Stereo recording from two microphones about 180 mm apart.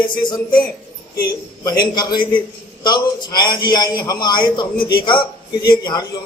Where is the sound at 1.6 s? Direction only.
25° left (ahead or behind).